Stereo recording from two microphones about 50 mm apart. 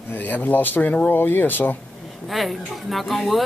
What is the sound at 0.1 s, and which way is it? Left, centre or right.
Speech, left.